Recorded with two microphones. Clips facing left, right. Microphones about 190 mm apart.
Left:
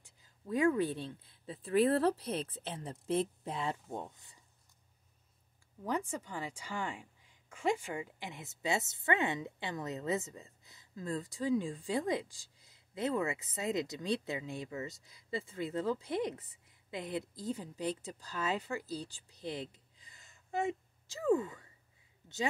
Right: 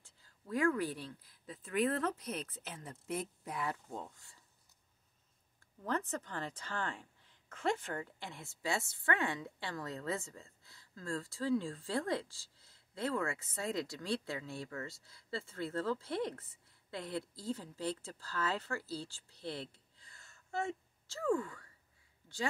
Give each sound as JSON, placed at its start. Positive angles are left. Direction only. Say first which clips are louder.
{"t": 0.0, "sound": "speech", "louder": "left 6 dB", "side_deg": 20}
{"t": 5.9, "sound": "a woman's voice", "louder": "left 1 dB", "side_deg": 10}